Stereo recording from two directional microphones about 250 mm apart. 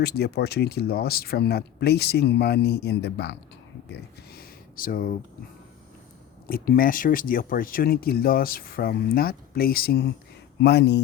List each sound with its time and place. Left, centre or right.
0.0 s speech: left
3.8 s a sound: left
6.5 s speech: left